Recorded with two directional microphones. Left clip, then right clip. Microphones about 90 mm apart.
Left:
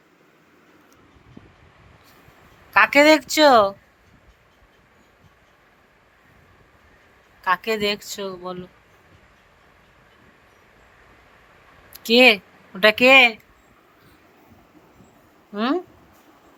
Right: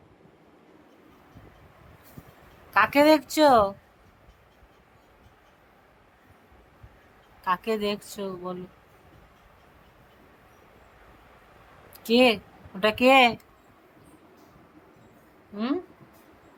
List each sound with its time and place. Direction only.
2.6 s speech: 20° left (ahead or behind)
7.4 s speech: 20° left (ahead or behind)
11.9 s speech: 20° left (ahead or behind)
15.5 s speech: 15° left (ahead or behind)